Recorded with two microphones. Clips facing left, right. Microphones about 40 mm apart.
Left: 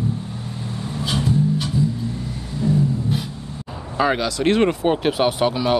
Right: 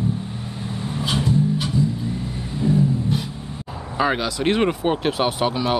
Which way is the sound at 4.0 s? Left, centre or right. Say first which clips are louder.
Left 2 dB; centre.